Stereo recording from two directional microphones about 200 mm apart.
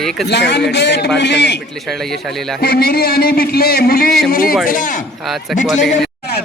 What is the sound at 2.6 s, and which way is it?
A man's voice, 50° left (ahead or behind).